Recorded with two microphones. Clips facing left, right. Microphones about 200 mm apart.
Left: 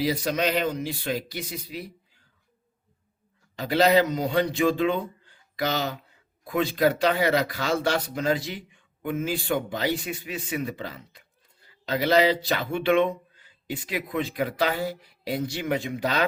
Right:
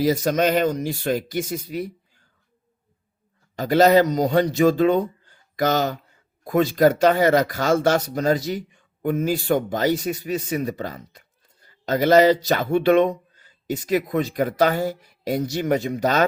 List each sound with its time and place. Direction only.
0.0 s speech: 45° right (ahead or behind)
3.5 s speech: 45° right (ahead or behind)